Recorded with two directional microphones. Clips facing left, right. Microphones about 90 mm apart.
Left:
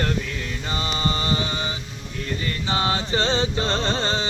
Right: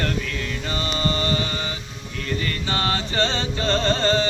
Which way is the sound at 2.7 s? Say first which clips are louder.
Left 3 dB; 20° left (ahead or behind).